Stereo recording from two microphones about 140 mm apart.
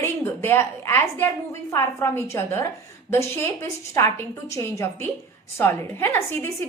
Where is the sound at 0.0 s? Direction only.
15° left (ahead or behind).